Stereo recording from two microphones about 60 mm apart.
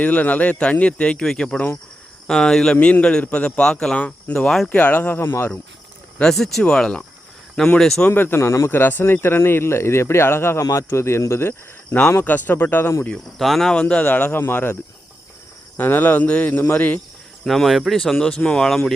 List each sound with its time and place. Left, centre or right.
0.0 s speech: left; by 1.5 s centre
1.5 s speech: left
2.2 s a man's voice: centre
4.7 s speech: left
6.3 s a man's voice: centre
8.0 s speech: left
8.8 s speech: left
10.6 s a man's voice: left
12.2 s speech: left
13.4 s speech: centre
13.7 s a man's voice: centre
14.0 s speech: left
15.8 s speech: left
17.4 s speech: centre